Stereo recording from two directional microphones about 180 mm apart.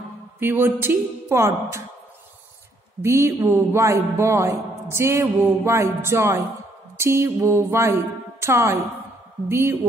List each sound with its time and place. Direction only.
0.4 s a man's voice: 10° right (ahead or behind)
3.0 s a man's voice: 15° right (ahead or behind)